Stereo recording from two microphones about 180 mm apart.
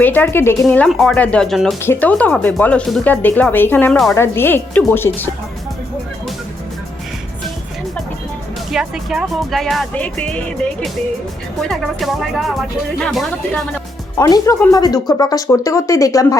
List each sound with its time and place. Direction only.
0.0 s speech: 10° left (ahead or behind)
8.7 s speech: 5° right (ahead or behind)
14.2 s speech: 20° left (ahead or behind)